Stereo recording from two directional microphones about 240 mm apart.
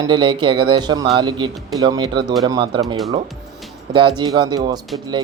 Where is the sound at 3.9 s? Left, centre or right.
Centre.